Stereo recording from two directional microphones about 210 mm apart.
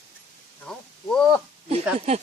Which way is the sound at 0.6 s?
5° left (ahead or behind).